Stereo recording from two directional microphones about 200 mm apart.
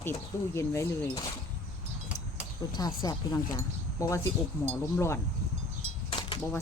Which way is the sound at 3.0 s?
15° left (ahead or behind).